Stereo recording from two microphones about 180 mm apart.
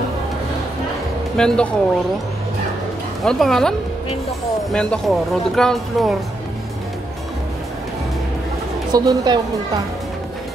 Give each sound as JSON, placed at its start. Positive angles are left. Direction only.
{"t": 1.3, "sound": "speech", "side_deg": 5}
{"t": 3.3, "sound": "speech", "side_deg": 0}
{"t": 4.7, "sound": "speech", "side_deg": 5}
{"t": 8.9, "sound": "a woman's voice", "side_deg": -20}